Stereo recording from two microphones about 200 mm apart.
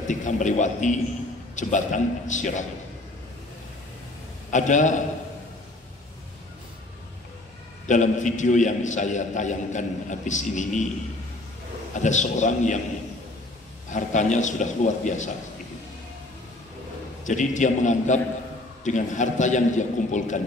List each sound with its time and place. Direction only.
0.1 s a man's voice: 40° left (ahead or behind)
4.5 s a man's voice: 40° left (ahead or behind)
7.8 s a man's voice: 35° left (ahead or behind)
11.9 s a man's voice: 35° left (ahead or behind)
13.8 s a man's voice: 35° left (ahead or behind)
17.2 s a man's voice: 40° left (ahead or behind)